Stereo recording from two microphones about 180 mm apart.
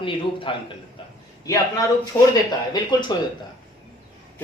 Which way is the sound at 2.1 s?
10° left (ahead or behind).